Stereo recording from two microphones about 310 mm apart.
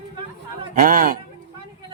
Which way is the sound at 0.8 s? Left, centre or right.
Right.